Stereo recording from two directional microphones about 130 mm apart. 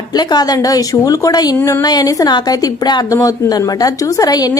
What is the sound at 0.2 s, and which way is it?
A woman's voice, 30° left (ahead or behind).